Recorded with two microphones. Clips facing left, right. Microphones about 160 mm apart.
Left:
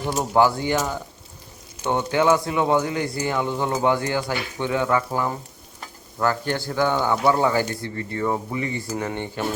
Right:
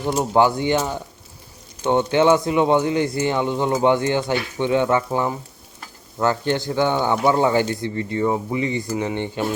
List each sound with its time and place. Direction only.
0.0 s speech: 15° right (ahead or behind)